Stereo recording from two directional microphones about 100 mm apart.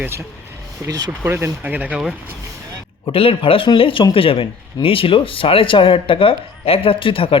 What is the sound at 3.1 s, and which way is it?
Speech, 65° left (ahead or behind).